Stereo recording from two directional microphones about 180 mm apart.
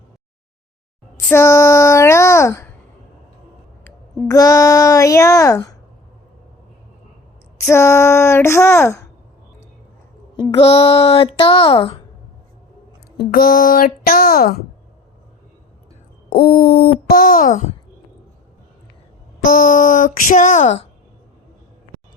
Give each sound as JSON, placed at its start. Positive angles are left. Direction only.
{"t": 1.3, "sound": "speech", "side_deg": 15}
{"t": 3.8, "sound": "speech", "side_deg": 20}
{"t": 7.6, "sound": "speech", "side_deg": 15}
{"t": 10.4, "sound": "a child's voice", "side_deg": 30}
{"t": 13.1, "sound": "speech", "side_deg": 55}
{"t": 16.3, "sound": "a sound", "side_deg": 55}
{"t": 19.5, "sound": "speech", "side_deg": 50}